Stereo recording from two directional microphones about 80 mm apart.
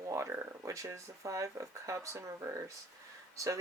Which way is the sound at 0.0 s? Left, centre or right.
Right.